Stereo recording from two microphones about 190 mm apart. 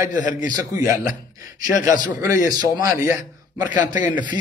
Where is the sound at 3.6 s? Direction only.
40° left (ahead or behind).